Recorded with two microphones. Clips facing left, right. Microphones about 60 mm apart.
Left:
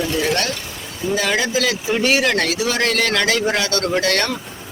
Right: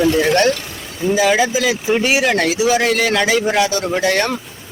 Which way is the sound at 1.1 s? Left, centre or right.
Centre.